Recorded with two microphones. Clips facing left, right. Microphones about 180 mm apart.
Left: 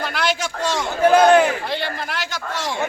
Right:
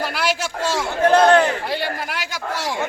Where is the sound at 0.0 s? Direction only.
5° right (ahead or behind).